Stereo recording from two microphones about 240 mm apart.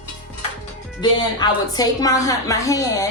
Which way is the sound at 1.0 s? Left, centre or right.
Centre.